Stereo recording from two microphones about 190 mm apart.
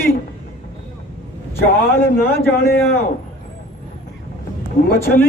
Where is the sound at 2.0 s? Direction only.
55° left (ahead or behind).